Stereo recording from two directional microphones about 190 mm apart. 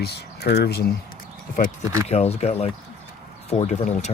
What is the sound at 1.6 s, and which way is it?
Speech, 45° left (ahead or behind).